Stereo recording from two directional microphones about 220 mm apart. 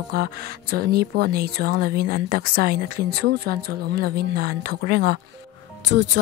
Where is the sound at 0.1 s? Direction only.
45° right (ahead or behind).